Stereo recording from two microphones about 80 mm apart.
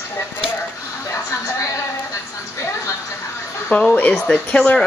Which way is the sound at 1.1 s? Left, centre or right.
Left.